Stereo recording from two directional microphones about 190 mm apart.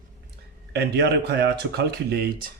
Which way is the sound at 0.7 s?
60° right (ahead or behind).